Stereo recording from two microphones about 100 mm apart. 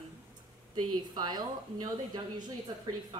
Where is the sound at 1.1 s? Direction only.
45° right (ahead or behind).